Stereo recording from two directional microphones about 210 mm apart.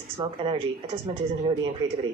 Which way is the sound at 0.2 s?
25° right (ahead or behind).